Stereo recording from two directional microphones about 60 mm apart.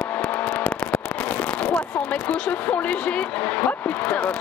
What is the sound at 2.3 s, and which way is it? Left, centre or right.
Speech, left.